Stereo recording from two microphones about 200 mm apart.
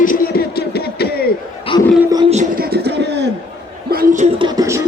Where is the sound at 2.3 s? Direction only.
35° right (ahead or behind).